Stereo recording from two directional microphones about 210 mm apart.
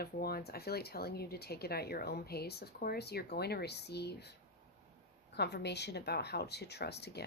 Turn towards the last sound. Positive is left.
turn(degrees=50)  # may be behind; listen again after turning